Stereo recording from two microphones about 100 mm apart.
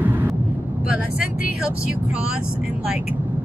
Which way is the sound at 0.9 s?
10° right (ahead or behind).